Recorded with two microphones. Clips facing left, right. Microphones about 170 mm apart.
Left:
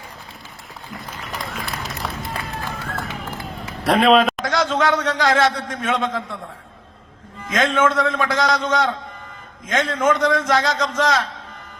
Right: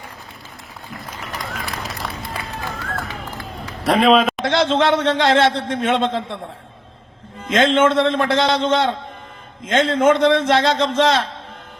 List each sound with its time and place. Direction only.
1.3 s run: centre (ahead or behind)
2.0 s music: centre (ahead or behind)
3.8 s a man's voice: centre (ahead or behind)
4.4 s a man's voice: 30° right (ahead or behind)
7.5 s a man's voice: 30° right (ahead or behind)